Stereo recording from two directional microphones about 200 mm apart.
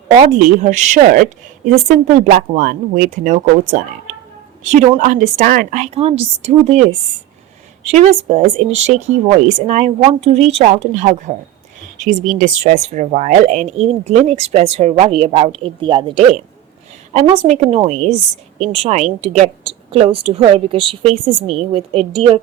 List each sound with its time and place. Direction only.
0.2 s speech: 35° right (ahead or behind)
7.9 s a woman's voice: 30° right (ahead or behind)